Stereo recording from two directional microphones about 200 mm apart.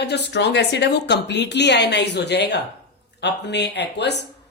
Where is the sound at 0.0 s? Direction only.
60° left (ahead or behind).